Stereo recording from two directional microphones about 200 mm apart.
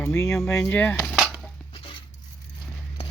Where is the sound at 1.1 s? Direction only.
Centre (ahead or behind).